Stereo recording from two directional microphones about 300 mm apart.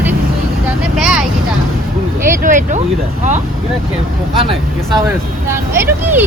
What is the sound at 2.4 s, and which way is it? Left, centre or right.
Speech, right.